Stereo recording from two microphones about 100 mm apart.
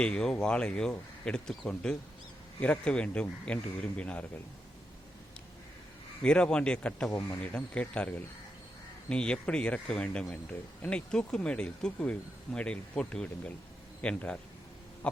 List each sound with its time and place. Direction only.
0.0 s speech: 10° left (ahead or behind)
6.2 s speech: 10° left (ahead or behind)
7.1 s speech: 25° left (ahead or behind)
7.4 s speech: 10° left (ahead or behind)
15.0 s a sound: 15° left (ahead or behind)